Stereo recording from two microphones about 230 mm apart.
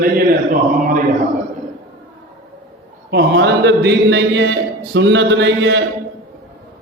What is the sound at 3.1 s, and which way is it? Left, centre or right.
Mantra, right.